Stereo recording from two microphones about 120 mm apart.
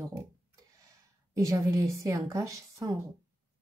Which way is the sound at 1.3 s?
25° right (ahead or behind).